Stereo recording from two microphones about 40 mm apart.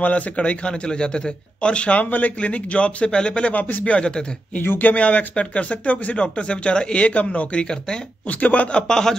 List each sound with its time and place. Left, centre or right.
0.0 s speech: left
0.7 s a man's voice: left
2.0 s a man's voice: left
4.6 s speech: left
4.9 s speech: left
8.7 s a man's voice: centre